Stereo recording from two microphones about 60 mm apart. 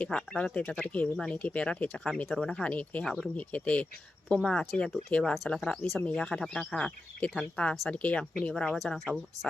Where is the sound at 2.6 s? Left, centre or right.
Left.